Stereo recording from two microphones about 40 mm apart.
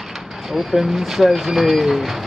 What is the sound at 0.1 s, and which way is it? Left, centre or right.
Vehicle, centre.